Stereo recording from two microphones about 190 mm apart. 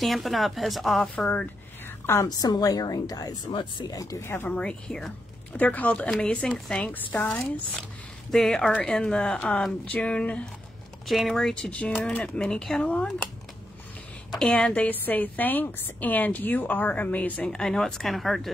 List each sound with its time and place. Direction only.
0.0 s a woman's voice: centre (ahead or behind)
2.0 s a woman's voice: 15° left (ahead or behind)
14.4 s a woman's voice: 5° left (ahead or behind)